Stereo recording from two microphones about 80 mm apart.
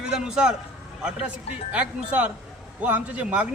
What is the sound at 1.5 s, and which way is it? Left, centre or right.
A man's voice, centre.